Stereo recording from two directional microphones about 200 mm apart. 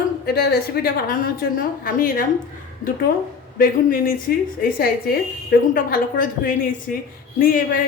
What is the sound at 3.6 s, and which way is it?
A woman's voice, 45° left (ahead or behind).